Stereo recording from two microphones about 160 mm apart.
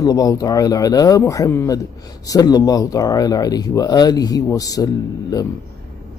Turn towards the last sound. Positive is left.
turn(degrees=25)  # may be behind; listen again after turning